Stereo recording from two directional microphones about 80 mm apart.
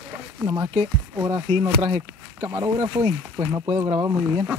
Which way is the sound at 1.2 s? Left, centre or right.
Right.